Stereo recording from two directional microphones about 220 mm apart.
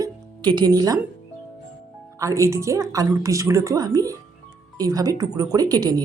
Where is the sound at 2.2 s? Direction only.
15° right (ahead or behind).